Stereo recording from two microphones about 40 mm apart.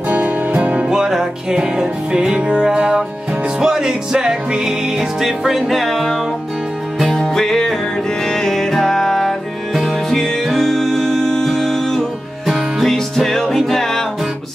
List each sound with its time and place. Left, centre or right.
0.1 s music: right
0.9 s music: centre
7.2 s music: centre